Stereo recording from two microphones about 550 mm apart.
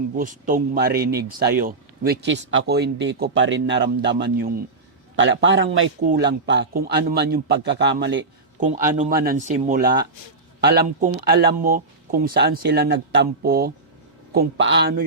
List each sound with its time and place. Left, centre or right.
0.2 s speech: centre